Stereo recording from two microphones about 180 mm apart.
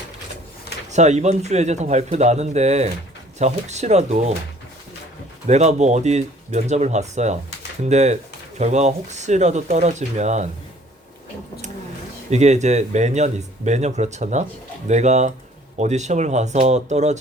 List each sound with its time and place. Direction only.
0.9 s speech: 40° right (ahead or behind)
5.5 s speech: 40° right (ahead or behind)
12.3 s speech: 40° right (ahead or behind)